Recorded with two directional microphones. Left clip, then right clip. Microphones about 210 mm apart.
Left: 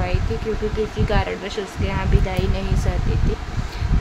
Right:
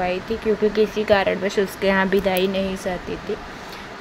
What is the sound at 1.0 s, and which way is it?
Speech, 15° right (ahead or behind).